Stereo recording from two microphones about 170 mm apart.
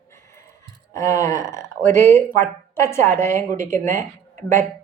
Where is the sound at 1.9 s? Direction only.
15° left (ahead or behind).